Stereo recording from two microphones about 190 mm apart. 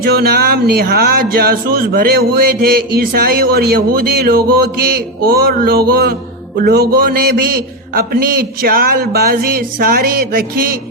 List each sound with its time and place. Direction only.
0.0 s speech: 55° right (ahead or behind)